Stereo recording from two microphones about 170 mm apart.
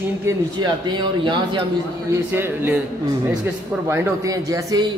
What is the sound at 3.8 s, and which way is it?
Speech, 15° right (ahead or behind).